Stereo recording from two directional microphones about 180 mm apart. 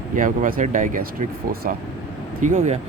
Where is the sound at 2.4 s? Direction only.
40° right (ahead or behind).